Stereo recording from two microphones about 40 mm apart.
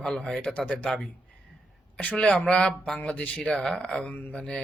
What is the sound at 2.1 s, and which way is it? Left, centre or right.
Speech, left.